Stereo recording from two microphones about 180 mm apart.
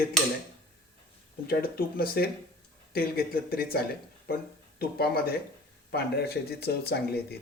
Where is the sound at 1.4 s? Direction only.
55° left (ahead or behind).